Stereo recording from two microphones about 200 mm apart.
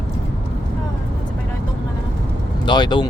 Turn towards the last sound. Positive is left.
turn(degrees=20)  # may be behind; listen again after turning